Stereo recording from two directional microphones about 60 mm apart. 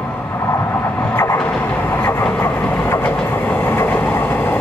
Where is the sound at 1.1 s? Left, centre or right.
Left.